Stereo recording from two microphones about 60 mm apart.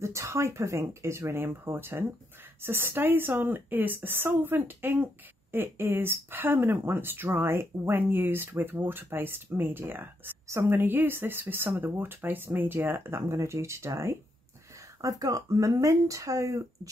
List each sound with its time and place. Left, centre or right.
0.0 s a woman's voice: right
15.0 s speech: right